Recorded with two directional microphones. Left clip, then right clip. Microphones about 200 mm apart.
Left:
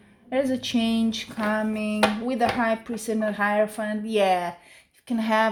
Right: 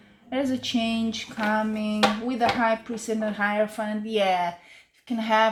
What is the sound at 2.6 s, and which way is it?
A woman's voice, 45° left (ahead or behind).